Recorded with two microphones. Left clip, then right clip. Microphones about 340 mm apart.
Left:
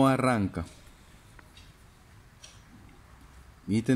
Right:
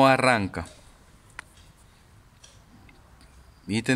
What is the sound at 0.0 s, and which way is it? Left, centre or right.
Speech, right.